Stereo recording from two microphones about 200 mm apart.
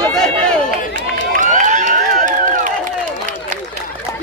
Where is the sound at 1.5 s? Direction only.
40° right (ahead or behind).